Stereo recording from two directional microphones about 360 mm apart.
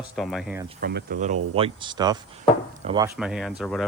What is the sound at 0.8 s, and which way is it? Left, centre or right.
Speech, right.